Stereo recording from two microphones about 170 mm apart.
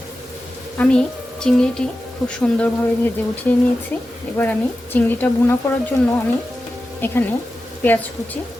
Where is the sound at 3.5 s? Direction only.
10° left (ahead or behind).